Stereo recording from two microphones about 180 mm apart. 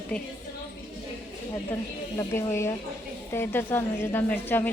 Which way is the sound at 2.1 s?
15° left (ahead or behind).